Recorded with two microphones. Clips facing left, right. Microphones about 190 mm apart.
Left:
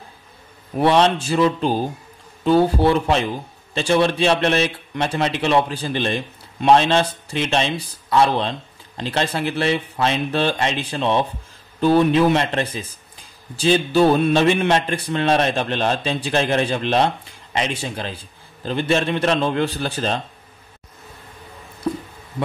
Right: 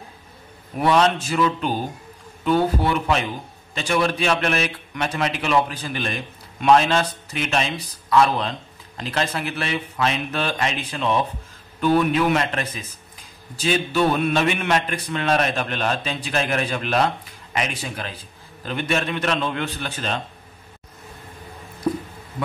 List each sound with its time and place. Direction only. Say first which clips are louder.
0.7 s a man's voice: left 2 dB; 30° left (ahead or behind)